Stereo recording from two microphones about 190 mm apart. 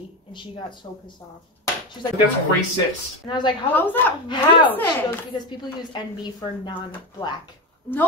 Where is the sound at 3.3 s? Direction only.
25° left (ahead or behind).